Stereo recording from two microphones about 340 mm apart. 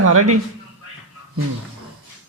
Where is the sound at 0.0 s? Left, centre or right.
Right.